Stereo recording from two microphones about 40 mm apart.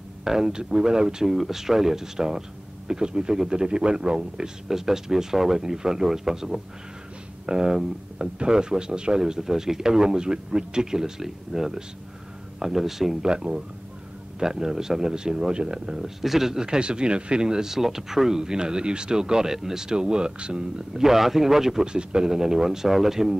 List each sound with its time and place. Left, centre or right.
0.2 s speech: centre
16.0 s speech: centre; by 20.8 s right
20.9 s speech: centre